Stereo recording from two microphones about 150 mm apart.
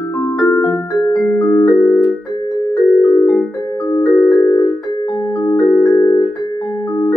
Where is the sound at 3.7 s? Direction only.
25° left (ahead or behind).